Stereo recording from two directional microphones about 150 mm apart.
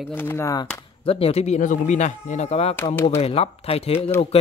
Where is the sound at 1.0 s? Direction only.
40° left (ahead or behind).